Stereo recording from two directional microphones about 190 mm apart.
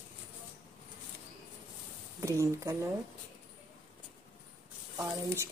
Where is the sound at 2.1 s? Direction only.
15° right (ahead or behind).